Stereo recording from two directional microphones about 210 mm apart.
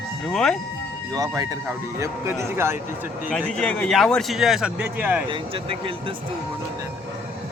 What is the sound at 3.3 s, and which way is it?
Speech, 5° left (ahead or behind).